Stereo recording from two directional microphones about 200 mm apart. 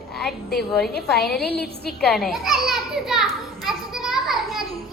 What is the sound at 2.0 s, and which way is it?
Children playing, centre (ahead or behind).